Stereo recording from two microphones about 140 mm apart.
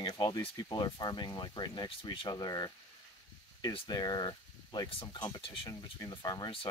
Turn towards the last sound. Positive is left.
turn(degrees=35)  # may be behind; listen again after turning